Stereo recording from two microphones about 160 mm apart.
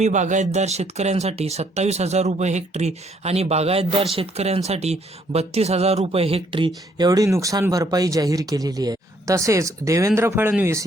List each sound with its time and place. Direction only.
0.0 s speech: 50° right (ahead or behind)
7.0 s speech: 20° right (ahead or behind)